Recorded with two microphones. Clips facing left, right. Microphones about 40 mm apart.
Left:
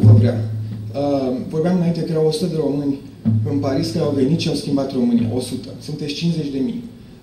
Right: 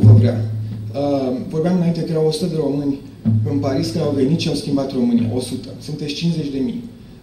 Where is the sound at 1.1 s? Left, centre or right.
Centre.